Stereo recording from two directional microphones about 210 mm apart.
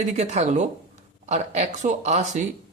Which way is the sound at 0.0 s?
30° right (ahead or behind).